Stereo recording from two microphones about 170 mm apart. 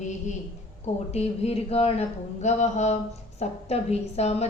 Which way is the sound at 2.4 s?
45° left (ahead or behind).